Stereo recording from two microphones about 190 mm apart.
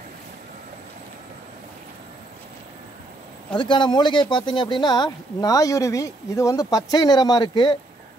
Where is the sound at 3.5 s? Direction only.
25° left (ahead or behind).